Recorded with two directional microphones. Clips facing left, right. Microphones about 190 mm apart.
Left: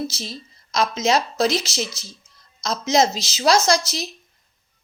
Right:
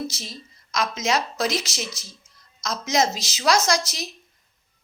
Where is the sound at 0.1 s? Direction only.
30° left (ahead or behind).